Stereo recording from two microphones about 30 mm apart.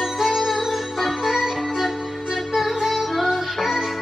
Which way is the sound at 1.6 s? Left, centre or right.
Centre.